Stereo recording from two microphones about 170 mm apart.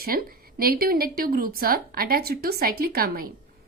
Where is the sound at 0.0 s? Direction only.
60° right (ahead or behind).